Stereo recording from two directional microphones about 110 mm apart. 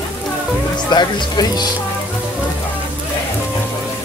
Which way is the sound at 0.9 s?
40° left (ahead or behind).